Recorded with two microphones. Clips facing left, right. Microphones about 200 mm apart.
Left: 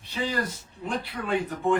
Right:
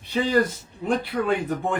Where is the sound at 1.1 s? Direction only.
60° right (ahead or behind).